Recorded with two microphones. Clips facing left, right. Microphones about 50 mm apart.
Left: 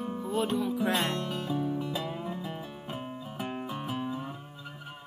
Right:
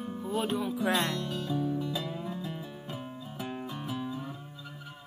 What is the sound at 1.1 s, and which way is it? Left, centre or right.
Music, left.